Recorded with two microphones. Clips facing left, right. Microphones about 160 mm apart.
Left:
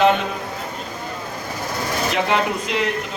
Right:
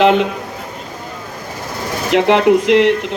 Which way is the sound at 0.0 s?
90° right.